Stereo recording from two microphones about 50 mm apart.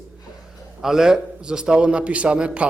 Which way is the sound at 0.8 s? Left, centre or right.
Centre.